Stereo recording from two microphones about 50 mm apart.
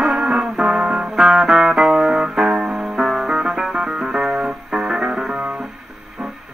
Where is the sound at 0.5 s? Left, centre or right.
Centre.